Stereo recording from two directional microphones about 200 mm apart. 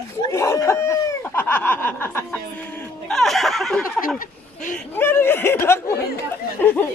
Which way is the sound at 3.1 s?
Centre (ahead or behind).